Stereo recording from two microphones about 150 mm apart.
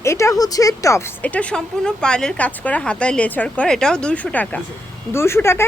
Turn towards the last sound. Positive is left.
turn(degrees=15)  # may be behind; listen again after turning